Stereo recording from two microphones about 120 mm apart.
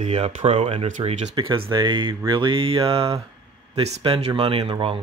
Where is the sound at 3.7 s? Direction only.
60° right (ahead or behind).